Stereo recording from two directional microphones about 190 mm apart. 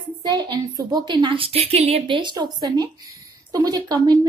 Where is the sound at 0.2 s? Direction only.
20° right (ahead or behind).